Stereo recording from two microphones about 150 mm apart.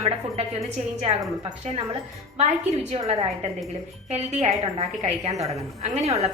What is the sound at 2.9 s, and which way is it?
Speech, 40° right (ahead or behind).